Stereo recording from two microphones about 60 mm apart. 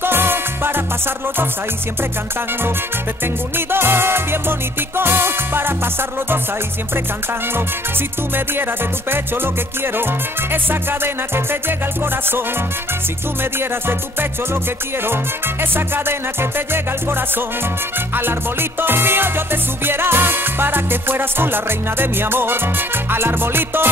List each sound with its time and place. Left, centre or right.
0.0 s music: right
3.5 s music: right
9.1 s music: right
10.5 s music: right
15.7 s music: right